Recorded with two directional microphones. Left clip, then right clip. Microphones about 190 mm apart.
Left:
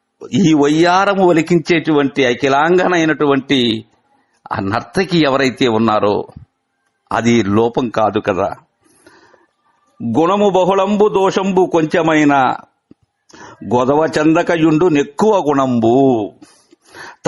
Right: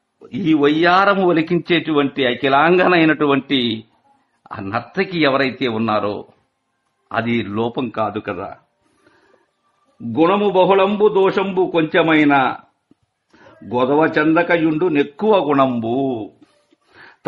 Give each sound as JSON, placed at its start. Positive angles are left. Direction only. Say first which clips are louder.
{"t": 0.2, "sound": "a man's voice", "louder": "left 3 dB", "side_deg": 45}
{"t": 10.1, "sound": "a man's voice", "louder": "left 3 dB", "side_deg": 40}
{"t": 16.9, "sound": "a sound", "louder": "left 10 dB", "side_deg": 40}